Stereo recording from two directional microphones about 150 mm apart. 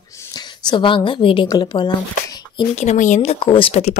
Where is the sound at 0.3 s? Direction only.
30° left (ahead or behind).